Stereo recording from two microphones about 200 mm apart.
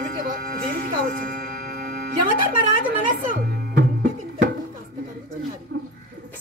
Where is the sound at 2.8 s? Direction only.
45° right (ahead or behind).